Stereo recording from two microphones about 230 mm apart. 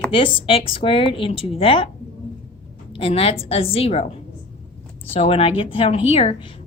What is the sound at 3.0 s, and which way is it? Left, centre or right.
A woman's voice, left.